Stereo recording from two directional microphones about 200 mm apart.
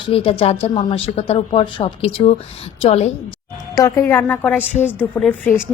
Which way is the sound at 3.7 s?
15° left (ahead or behind).